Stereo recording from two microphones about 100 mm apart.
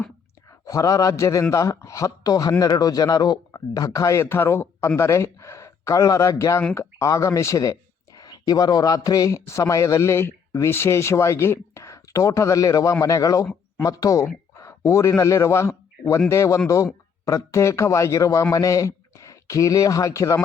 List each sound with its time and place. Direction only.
0.6 s a man's voice: 35° left (ahead or behind)